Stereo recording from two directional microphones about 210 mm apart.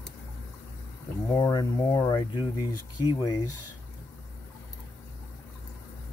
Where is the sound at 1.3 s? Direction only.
15° left (ahead or behind).